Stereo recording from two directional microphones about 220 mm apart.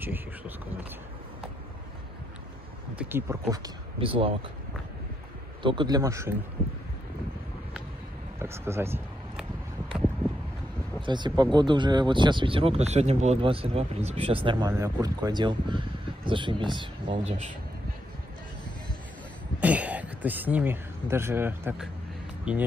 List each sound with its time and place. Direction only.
3.0 s speech: 10° right (ahead or behind)
5.6 s speech: 20° right (ahead or behind)
8.4 s a sound: 10° right (ahead or behind)
11.0 s speech: 20° right (ahead or behind)
19.6 s speech: 5° right (ahead or behind)